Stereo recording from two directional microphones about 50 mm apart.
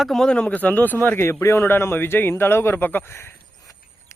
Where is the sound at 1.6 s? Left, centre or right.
Left.